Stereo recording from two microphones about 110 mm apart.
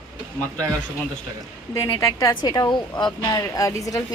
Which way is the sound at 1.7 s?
30° left (ahead or behind).